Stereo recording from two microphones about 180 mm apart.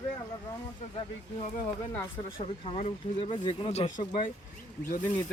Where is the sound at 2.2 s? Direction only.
30° left (ahead or behind).